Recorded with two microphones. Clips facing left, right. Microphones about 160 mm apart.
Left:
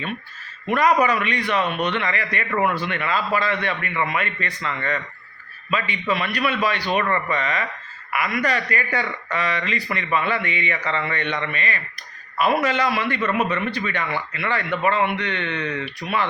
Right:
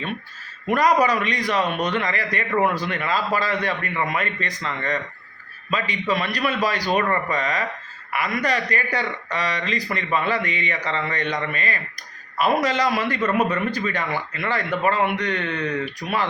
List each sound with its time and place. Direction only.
0.7 s a man's voice: 40° right (ahead or behind)